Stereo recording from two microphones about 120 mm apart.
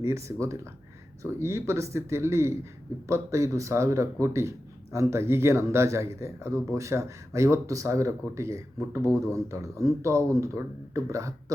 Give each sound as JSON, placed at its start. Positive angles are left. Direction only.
{"t": 0.0, "sound": "speech", "side_deg": -25}